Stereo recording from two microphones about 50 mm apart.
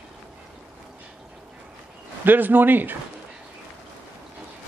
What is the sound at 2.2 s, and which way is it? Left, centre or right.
Speech, right.